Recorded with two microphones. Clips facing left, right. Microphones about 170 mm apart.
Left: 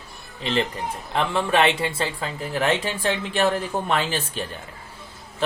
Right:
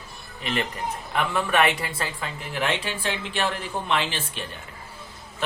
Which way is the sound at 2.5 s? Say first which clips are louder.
Left 4 dB; 40° left (ahead or behind).